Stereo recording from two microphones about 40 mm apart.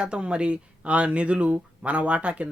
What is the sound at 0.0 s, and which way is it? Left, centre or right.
Speech, right.